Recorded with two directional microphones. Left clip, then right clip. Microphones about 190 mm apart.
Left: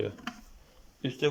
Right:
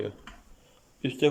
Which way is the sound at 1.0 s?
20° right (ahead or behind).